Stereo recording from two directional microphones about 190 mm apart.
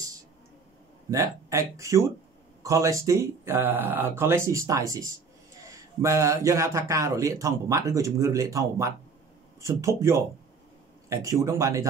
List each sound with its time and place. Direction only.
1.1 s speech: 15° right (ahead or behind)